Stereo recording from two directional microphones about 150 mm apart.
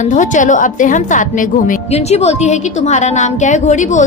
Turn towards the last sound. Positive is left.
turn(degrees=55)  # may be behind; listen again after turning